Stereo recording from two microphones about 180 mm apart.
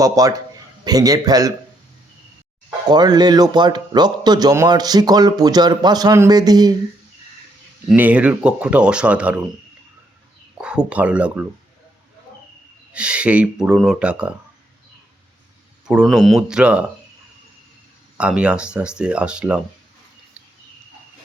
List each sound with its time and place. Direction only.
0.0 s speech: 20° right (ahead or behind)
2.9 s speech: 25° right (ahead or behind)
7.9 s speech: 10° right (ahead or behind)
10.6 s speech: 5° right (ahead or behind)
12.9 s speech: 5° right (ahead or behind)
15.9 s speech: 5° right (ahead or behind)
18.2 s speech: 5° right (ahead or behind)